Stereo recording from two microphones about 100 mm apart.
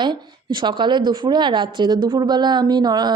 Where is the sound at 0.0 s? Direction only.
50° right (ahead or behind).